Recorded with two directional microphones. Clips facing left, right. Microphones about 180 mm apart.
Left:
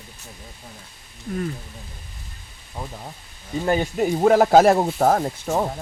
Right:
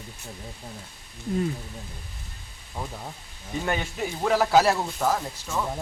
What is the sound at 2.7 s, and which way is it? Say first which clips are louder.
Speech: left 1 dB; 5° left (ahead or behind).